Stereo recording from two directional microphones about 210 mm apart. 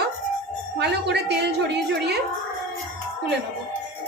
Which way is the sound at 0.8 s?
50° right (ahead or behind).